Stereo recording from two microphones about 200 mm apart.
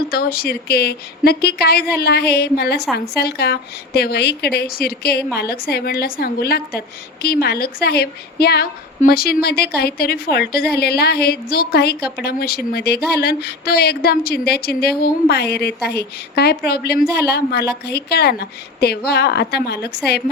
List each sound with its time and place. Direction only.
0.1 s speech: 50° left (ahead or behind)